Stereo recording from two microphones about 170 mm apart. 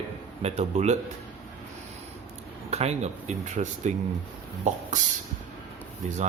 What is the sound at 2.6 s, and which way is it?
Speech, 40° right (ahead or behind).